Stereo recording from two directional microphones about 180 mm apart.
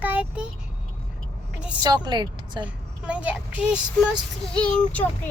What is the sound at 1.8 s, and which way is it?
Speech, 25° right (ahead or behind).